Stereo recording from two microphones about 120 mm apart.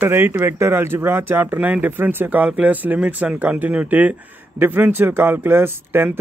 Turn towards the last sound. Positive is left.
turn(degrees=-20)  # may be behind; listen again after turning